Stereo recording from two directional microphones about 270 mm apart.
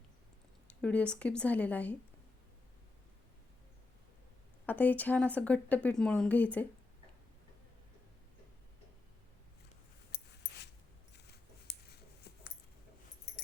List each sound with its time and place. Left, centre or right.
0.8 s speech: centre
4.6 s speech: centre
11.1 s a sound: left